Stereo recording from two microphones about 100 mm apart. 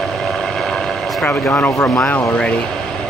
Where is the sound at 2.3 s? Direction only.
10° left (ahead or behind).